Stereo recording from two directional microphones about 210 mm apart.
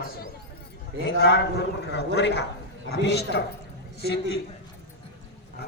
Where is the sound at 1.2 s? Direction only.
50° left (ahead or behind).